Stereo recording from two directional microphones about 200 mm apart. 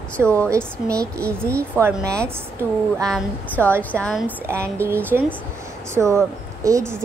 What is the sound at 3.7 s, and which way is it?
A woman's voice, 10° right (ahead or behind).